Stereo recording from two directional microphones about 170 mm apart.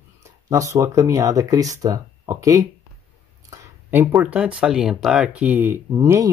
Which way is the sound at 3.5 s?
15° right (ahead or behind).